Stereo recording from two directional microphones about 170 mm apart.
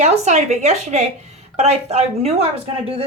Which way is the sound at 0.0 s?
45° right (ahead or behind).